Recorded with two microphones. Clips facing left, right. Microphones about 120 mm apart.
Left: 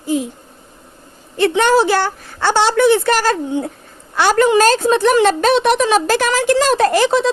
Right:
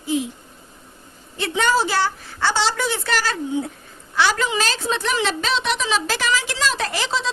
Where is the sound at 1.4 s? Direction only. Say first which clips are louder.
Left 7 dB; 60° left (ahead or behind).